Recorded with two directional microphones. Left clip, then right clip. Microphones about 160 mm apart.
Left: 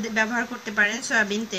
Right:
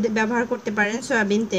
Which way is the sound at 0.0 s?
45° right (ahead or behind).